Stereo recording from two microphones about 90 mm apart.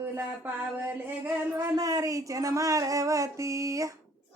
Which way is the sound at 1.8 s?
40° right (ahead or behind).